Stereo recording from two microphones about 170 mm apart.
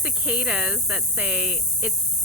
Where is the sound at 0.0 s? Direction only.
5° right (ahead or behind).